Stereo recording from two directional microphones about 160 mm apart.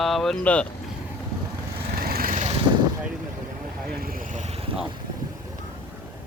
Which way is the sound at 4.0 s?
65° right (ahead or behind).